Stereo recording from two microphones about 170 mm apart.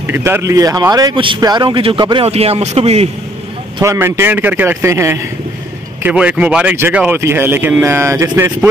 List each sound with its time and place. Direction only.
0.0 s speech: 15° right (ahead or behind); by 3.1 s 40° right (ahead or behind)
3.8 s speech: 15° right (ahead or behind)